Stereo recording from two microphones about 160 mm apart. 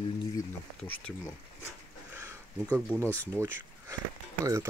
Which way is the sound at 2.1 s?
15° right (ahead or behind).